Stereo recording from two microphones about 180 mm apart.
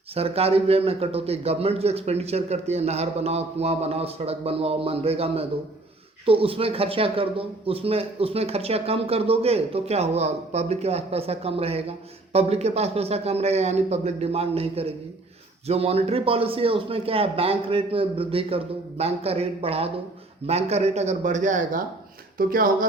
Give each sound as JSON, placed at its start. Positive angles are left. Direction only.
{"t": 0.1, "sound": "a man's voice", "side_deg": -35}